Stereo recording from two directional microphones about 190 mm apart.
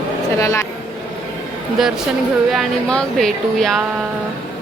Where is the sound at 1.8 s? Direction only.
Centre (ahead or behind).